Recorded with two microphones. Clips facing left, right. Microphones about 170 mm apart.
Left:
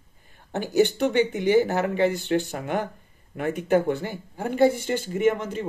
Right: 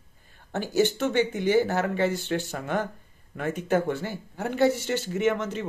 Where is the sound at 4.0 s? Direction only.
15° left (ahead or behind).